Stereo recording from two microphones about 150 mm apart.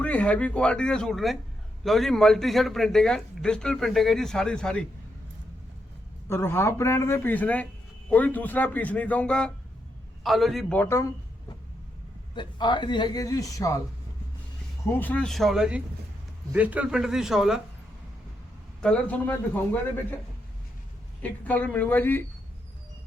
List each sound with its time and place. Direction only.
0.0 s speech: 10° left (ahead or behind)
6.2 s speech: 15° left (ahead or behind)
12.3 s speech: 30° left (ahead or behind)
14.8 s speech: 15° left (ahead or behind); by 17.6 s 5° right (ahead or behind)
18.8 s speech: 10° left (ahead or behind)
21.2 s speech: 10° left (ahead or behind)